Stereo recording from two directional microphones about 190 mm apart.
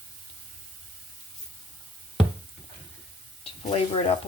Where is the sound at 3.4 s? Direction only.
30° left (ahead or behind).